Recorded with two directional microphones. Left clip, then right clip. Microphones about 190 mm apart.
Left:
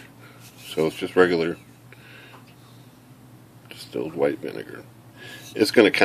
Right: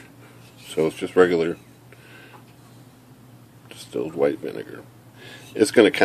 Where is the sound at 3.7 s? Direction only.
5° right (ahead or behind).